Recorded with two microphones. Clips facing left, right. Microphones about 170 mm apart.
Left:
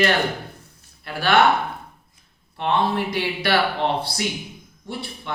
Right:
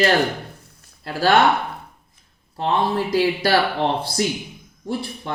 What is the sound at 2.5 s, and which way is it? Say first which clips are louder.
Speech: right 1 dB; 35° right (ahead or behind).